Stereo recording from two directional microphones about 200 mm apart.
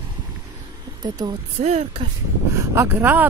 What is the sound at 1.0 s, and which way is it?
Speech, 20° right (ahead or behind).